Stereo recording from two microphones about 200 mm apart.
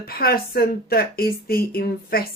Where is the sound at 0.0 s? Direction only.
50° left (ahead or behind).